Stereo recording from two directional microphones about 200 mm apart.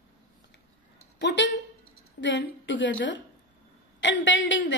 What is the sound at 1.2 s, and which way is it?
A woman's voice, 60° left (ahead or behind).